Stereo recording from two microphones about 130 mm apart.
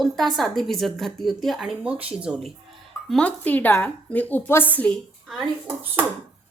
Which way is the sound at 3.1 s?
10° left (ahead or behind).